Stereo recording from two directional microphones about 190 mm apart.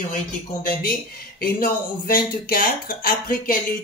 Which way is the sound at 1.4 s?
45° left (ahead or behind).